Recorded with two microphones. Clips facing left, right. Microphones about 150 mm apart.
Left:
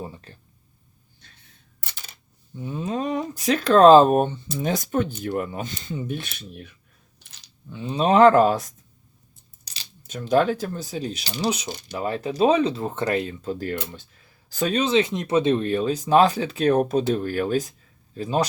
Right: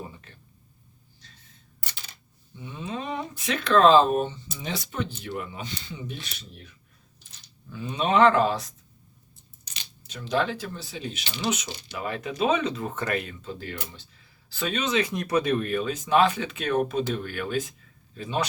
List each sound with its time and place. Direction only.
0.3 s a sound: 35° left (ahead or behind)
2.6 s speech: 45° left (ahead or behind)
7.7 s speech: 30° left (ahead or behind)
13.5 s speech: 45° left (ahead or behind)